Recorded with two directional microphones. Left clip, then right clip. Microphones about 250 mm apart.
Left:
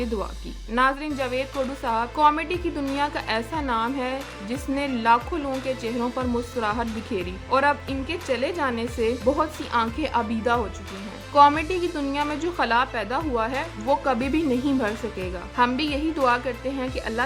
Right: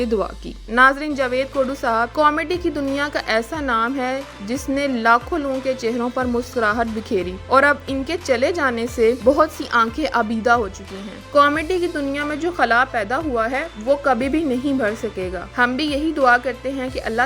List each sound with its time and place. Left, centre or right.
0.7 s a woman's voice: right